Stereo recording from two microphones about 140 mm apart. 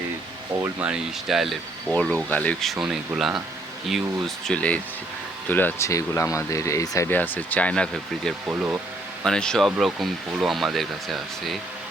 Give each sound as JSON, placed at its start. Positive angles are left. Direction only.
{"t": 0.6, "sound": "speech", "side_deg": -10}
{"t": 4.4, "sound": "speech", "side_deg": 10}
{"t": 8.4, "sound": "speech", "side_deg": -10}
{"t": 9.2, "sound": "speech", "side_deg": 5}